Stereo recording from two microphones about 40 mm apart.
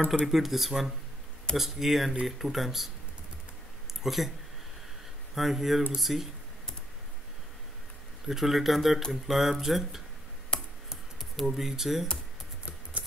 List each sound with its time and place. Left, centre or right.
0.3 s speech: centre
4.0 s speech: centre
5.3 s speech: centre
8.3 s speech: centre
10.5 s computer keyboard: left
11.4 s speech: centre